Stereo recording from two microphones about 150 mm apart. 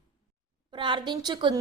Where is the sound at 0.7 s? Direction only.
30° right (ahead or behind).